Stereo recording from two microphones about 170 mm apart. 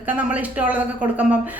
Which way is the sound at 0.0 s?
10° right (ahead or behind).